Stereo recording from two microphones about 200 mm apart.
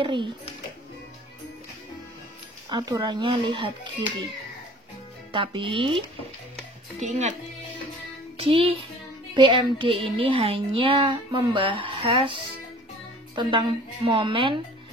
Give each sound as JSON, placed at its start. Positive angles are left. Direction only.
{"t": 0.0, "sound": "speech", "side_deg": -25}
{"t": 2.7, "sound": "speech", "side_deg": -20}
{"t": 5.3, "sound": "speech", "side_deg": -25}
{"t": 8.4, "sound": "child singing", "side_deg": -30}
{"t": 9.3, "sound": "speech", "side_deg": -20}